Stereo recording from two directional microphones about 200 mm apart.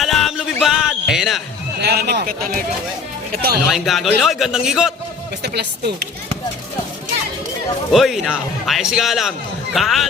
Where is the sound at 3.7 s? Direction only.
Centre (ahead or behind).